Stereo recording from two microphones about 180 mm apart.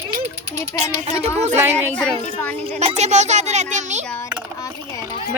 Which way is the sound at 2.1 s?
35° right (ahead or behind).